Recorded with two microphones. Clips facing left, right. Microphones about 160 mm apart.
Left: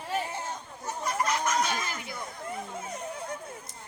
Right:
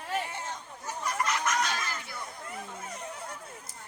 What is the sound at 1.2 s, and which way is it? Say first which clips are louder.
Chicken: left 2 dB; 35° left (ahead or behind).